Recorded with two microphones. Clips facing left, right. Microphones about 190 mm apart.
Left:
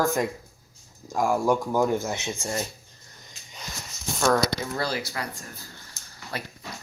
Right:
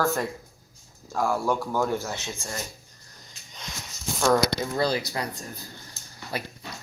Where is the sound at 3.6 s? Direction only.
Centre (ahead or behind).